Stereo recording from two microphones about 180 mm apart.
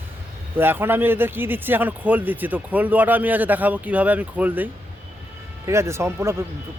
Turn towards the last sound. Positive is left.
turn(degrees=-15)  # may be behind; listen again after turning